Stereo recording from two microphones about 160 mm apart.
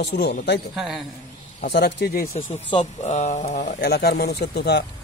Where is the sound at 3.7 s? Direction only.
90° left.